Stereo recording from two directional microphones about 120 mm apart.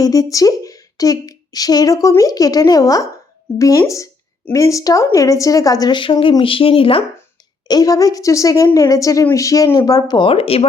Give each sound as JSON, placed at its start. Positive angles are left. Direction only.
{"t": 0.0, "sound": "speech", "side_deg": 30}
{"t": 7.7, "sound": "speech", "side_deg": 30}